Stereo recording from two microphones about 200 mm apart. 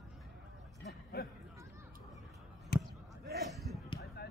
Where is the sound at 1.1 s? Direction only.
55° left (ahead or behind).